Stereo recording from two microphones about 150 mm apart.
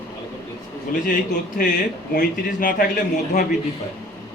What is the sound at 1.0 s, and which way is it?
A man's voice, 70° left (ahead or behind).